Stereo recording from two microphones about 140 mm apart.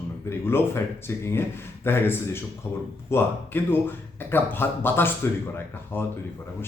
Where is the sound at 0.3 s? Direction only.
15° left (ahead or behind).